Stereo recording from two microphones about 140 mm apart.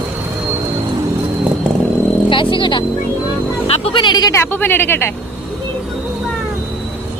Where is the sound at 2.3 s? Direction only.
35° left (ahead or behind).